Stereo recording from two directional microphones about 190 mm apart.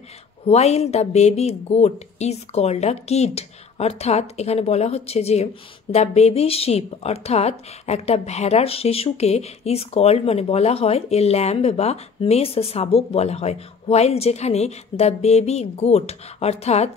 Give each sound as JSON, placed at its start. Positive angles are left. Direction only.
{"t": 0.5, "sound": "a woman's voice", "side_deg": 35}